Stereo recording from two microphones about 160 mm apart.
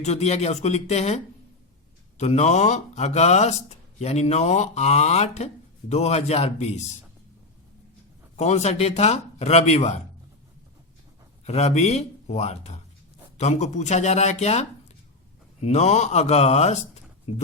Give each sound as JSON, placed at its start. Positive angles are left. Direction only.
{"t": 0.0, "sound": "speech", "side_deg": 45}
{"t": 8.4, "sound": "speech", "side_deg": 45}
{"t": 11.4, "sound": "speech", "side_deg": 45}